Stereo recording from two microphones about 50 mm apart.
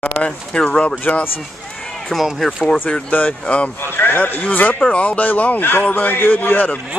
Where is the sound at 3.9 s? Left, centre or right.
Left.